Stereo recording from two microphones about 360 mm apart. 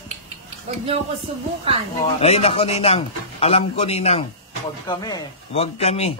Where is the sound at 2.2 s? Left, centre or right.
Centre.